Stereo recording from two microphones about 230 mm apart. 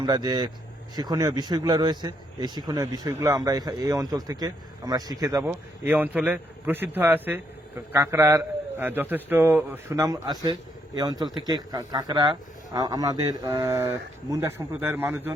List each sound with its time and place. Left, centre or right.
0.0 s a man's voice: centre